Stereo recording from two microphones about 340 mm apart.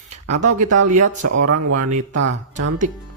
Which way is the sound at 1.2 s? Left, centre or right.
Right.